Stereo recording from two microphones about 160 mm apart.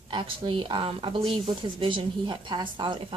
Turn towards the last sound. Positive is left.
turn(degrees=-30)  # may be behind; listen again after turning